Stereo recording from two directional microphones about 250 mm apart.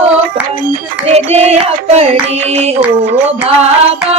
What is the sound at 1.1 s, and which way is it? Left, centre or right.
Child singing, right.